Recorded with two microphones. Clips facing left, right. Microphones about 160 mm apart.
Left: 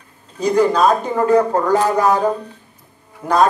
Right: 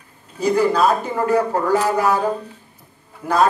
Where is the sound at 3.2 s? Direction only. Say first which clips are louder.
Left 3 dB; 30° left (ahead or behind).